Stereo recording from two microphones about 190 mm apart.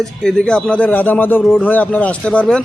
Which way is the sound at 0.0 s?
5° left (ahead or behind).